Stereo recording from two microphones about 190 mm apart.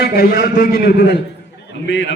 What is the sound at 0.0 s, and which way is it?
A man's voice, 55° left (ahead or behind).